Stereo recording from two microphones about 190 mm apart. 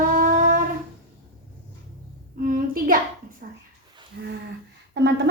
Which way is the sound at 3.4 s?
50° right (ahead or behind).